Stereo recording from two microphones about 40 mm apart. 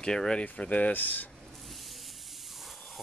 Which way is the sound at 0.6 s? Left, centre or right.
Left.